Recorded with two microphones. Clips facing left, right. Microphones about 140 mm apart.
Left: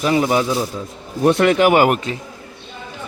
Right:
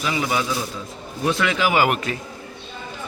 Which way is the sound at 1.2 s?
55° left (ahead or behind).